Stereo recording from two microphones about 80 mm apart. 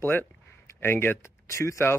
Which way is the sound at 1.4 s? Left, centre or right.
Left.